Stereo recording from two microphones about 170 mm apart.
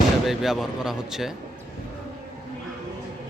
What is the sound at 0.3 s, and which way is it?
Speech, centre (ahead or behind).